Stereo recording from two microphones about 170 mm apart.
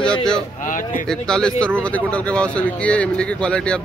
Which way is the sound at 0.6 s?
50° left (ahead or behind).